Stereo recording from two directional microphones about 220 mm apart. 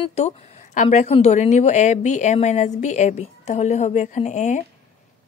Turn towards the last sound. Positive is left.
turn(degrees=35)  # may be behind; listen again after turning